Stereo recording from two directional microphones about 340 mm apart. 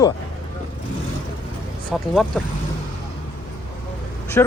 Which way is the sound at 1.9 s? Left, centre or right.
Centre.